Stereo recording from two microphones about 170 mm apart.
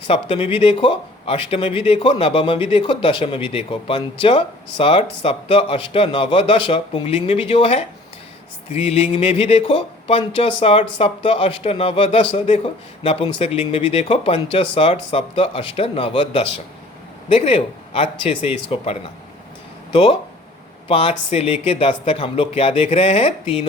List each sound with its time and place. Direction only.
0.1 s speech: 35° left (ahead or behind)